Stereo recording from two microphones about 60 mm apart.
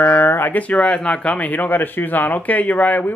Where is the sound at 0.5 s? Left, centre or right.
Left.